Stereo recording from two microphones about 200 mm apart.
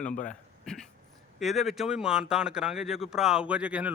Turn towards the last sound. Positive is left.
turn(degrees=-5)  # may be behind; listen again after turning